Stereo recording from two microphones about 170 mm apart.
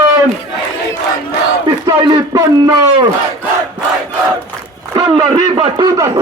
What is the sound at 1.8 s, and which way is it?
A man's voice, 25° right (ahead or behind).